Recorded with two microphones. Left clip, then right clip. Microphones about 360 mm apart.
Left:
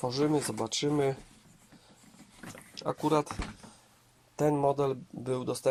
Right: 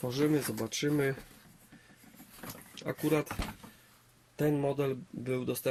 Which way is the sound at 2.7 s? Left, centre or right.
Centre.